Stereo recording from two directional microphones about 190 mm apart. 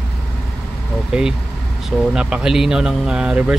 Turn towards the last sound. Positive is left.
turn(degrees=-5)  # may be behind; listen again after turning